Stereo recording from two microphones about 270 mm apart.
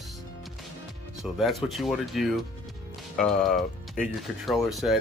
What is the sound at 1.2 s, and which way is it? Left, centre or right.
Speech, centre.